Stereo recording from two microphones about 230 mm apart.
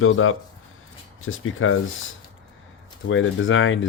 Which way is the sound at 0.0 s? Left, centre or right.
Left.